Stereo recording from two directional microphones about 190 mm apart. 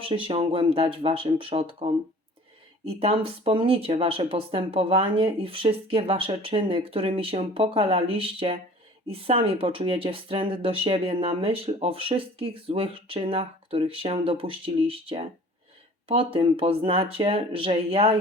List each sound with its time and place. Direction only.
0.0 s speech: 30° right (ahead or behind)